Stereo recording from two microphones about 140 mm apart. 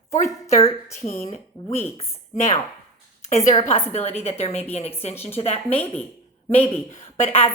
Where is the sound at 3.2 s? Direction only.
55° left (ahead or behind).